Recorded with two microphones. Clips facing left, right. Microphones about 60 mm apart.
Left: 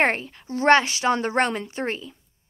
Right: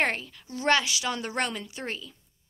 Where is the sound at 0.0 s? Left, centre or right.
Left.